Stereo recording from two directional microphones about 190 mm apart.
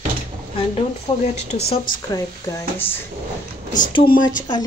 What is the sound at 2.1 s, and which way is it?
Speech, 15° left (ahead or behind).